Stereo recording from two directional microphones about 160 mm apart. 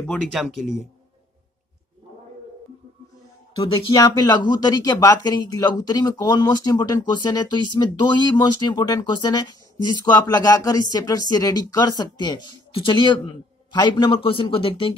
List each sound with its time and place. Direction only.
0.0 s speech: 5° left (ahead or behind)
3.6 s speech: 25° left (ahead or behind)